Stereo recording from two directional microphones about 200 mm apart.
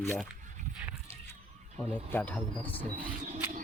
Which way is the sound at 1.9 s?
10° left (ahead or behind).